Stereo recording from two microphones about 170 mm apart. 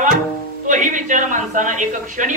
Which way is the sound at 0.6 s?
50° right (ahead or behind).